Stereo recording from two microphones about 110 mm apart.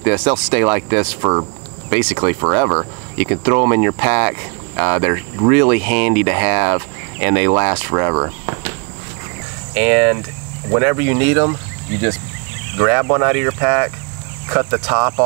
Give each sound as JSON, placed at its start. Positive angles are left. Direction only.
{"t": 0.0, "sound": "speech", "side_deg": -25}
{"t": 1.9, "sound": "speech", "side_deg": -25}
{"t": 9.8, "sound": "speech", "side_deg": -25}